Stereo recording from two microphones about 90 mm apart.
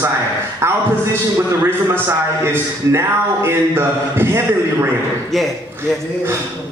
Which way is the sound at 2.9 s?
30° right (ahead or behind).